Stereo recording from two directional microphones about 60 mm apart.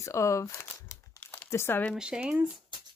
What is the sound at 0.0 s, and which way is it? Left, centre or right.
Speech, left.